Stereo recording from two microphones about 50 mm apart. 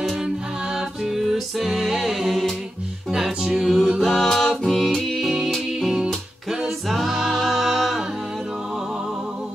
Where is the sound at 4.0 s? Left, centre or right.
Centre.